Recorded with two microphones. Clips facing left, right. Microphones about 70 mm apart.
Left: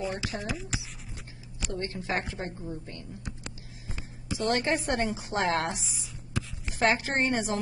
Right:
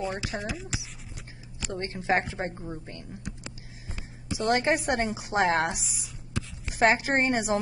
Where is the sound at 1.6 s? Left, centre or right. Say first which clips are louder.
Even; right.